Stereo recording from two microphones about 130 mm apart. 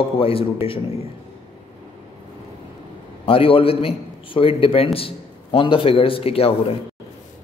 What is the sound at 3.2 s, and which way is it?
A man's voice, 45° left (ahead or behind).